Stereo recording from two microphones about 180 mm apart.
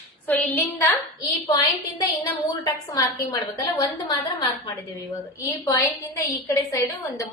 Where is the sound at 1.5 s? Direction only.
20° left (ahead or behind).